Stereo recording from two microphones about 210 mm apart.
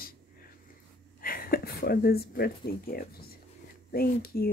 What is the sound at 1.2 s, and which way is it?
Speech, 45° left (ahead or behind).